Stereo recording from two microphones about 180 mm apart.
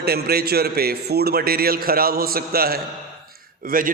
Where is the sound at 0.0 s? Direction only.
60° right (ahead or behind).